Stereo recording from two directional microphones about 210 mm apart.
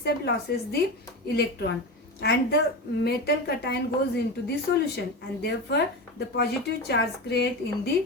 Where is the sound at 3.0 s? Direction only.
50° left (ahead or behind).